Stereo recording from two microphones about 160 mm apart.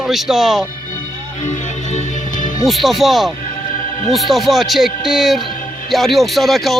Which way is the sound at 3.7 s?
55° left (ahead or behind).